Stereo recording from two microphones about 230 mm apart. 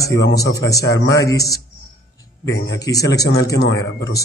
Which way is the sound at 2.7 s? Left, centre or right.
Centre.